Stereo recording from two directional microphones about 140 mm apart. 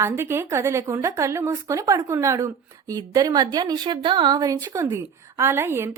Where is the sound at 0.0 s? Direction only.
20° right (ahead or behind).